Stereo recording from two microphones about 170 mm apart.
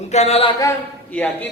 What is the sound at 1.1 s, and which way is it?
Speech, 10° left (ahead or behind).